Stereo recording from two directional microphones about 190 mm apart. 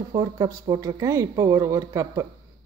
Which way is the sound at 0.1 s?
20° right (ahead or behind).